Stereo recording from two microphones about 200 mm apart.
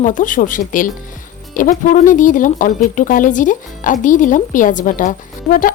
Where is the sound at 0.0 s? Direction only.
40° left (ahead or behind).